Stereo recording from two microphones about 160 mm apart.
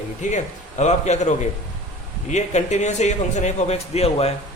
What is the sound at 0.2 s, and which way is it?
A man's voice, 50° left (ahead or behind).